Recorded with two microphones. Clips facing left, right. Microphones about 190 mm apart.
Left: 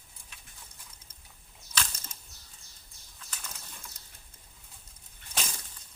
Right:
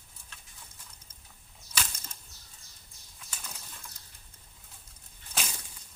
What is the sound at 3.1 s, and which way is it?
Bird flight, 10° right (ahead or behind).